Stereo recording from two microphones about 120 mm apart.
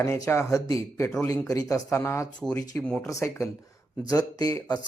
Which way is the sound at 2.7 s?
10° left (ahead or behind).